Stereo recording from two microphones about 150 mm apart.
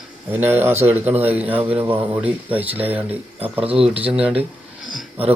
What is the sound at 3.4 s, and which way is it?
Speech, 40° right (ahead or behind).